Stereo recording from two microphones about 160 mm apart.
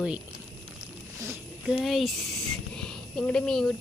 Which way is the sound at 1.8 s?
Centre (ahead or behind).